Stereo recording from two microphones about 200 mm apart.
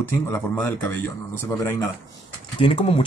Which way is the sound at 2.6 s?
25° left (ahead or behind).